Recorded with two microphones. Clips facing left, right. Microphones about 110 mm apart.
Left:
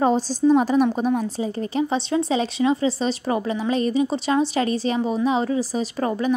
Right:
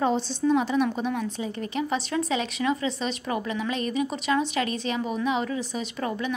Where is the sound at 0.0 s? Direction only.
40° left (ahead or behind).